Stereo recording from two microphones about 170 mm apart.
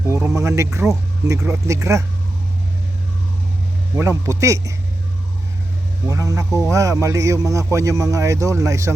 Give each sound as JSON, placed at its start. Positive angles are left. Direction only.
{"t": 0.1, "sound": "speech", "side_deg": -15}
{"t": 4.3, "sound": "speech", "side_deg": -20}
{"t": 6.1, "sound": "a man's voice", "side_deg": -20}